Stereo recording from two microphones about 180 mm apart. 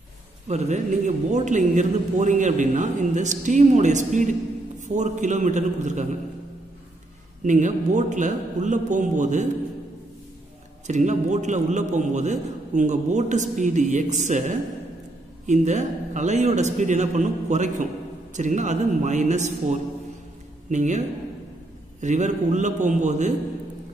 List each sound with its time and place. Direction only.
0.5 s a man's voice: 40° right (ahead or behind)
7.4 s a man's voice: 45° right (ahead or behind)
10.9 s a man's voice: 40° right (ahead or behind)
22.0 s a man's voice: 40° right (ahead or behind)